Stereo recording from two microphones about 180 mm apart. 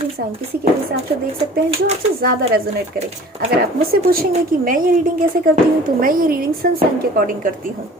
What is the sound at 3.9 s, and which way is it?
Speech, 55° right (ahead or behind).